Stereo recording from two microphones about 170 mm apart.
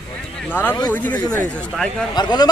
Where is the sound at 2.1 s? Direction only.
25° left (ahead or behind).